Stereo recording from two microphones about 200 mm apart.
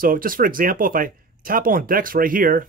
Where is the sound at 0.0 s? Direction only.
45° right (ahead or behind).